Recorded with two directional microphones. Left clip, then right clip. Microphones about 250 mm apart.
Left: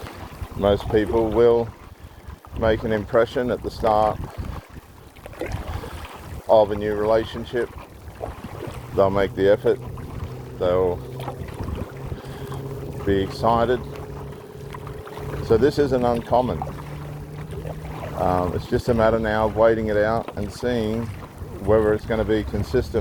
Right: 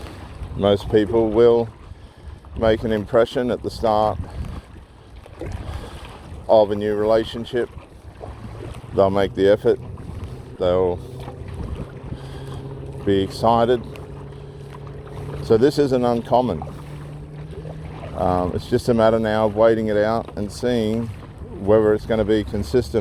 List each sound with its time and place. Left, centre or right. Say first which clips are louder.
0.6 s speech: right 2 dB; right
5.4 s boat: left 4 dB; left
6.5 s speech: right 1 dB; right
9.0 s speech: right 2 dB; right
13.1 s speech: right 2 dB; right
15.4 s speech: right 2 dB; right
18.2 s speech: right 1 dB; right